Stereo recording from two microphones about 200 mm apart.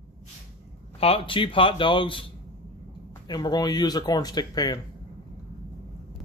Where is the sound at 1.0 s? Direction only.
30° left (ahead or behind).